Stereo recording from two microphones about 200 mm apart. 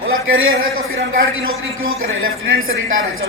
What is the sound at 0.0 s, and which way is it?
A man's voice, 90° right.